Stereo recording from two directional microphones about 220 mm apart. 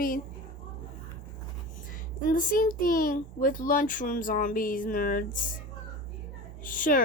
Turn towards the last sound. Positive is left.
turn(degrees=40)  # may be behind; listen again after turning